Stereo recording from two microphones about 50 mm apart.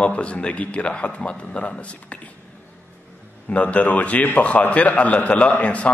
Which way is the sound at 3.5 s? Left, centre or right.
Left.